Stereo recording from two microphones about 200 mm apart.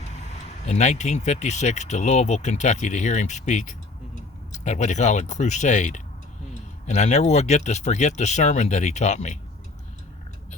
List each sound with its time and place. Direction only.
0.2 s speech: 35° left (ahead or behind)